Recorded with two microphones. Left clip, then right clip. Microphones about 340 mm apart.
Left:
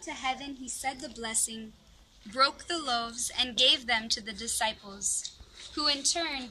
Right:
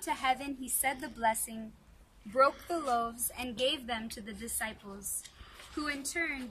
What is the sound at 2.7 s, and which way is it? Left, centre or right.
A woman's voice, centre.